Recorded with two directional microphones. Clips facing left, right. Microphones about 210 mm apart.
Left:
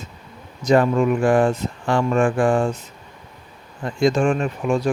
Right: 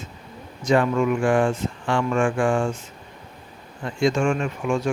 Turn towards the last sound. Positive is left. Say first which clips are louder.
# left 3 dB
turn(degrees=35)  # may be behind; listen again after turning